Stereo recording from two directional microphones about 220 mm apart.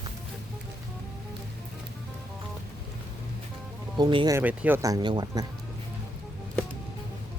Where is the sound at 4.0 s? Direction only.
20° right (ahead or behind).